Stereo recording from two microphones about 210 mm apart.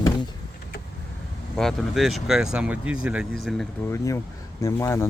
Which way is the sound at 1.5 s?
Centre (ahead or behind).